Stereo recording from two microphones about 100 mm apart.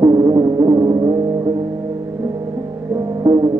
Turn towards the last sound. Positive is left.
turn(degrees=-45)  # may be behind; listen again after turning